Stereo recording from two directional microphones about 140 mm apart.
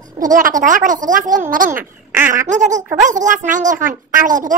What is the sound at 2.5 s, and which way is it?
A woman's voice, 60° right (ahead or behind).